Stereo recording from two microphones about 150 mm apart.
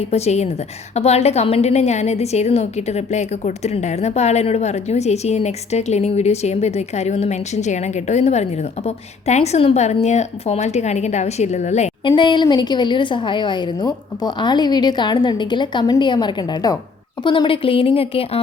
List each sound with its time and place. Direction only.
0.0 s a woman's voice: 45° left (ahead or behind)
12.0 s a woman's voice: 30° left (ahead or behind)